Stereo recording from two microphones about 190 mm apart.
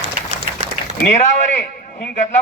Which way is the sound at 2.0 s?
45° left (ahead or behind).